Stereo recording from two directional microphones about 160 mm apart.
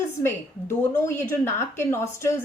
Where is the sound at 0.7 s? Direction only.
15° left (ahead or behind).